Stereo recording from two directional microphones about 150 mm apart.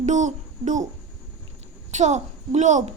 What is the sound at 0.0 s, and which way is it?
Speech, 55° right (ahead or behind).